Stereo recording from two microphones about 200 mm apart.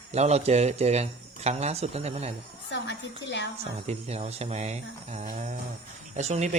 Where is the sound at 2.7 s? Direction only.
60° left (ahead or behind).